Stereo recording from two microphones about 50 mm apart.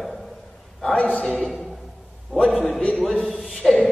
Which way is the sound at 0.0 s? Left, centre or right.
Centre.